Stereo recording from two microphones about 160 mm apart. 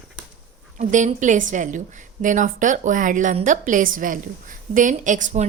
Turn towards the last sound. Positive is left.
turn(degrees=-50)  # may be behind; listen again after turning